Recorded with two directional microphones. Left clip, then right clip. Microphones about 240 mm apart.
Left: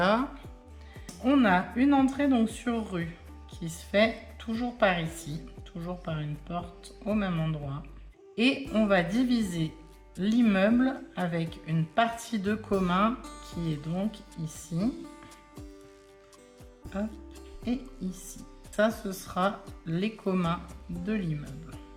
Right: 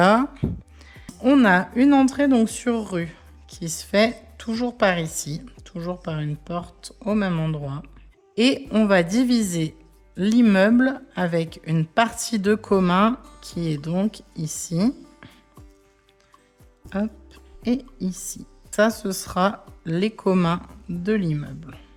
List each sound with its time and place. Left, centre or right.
0.0 s music: right
1.2 s a woman's voice: right
16.9 s speech: right